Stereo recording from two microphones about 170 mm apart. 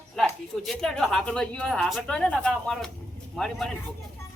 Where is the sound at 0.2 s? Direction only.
Centre (ahead or behind).